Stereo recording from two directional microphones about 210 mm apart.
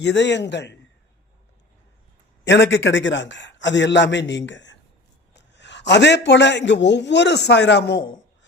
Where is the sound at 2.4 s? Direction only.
60° left (ahead or behind).